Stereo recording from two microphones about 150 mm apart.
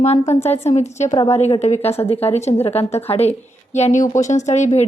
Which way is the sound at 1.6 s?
45° left (ahead or behind).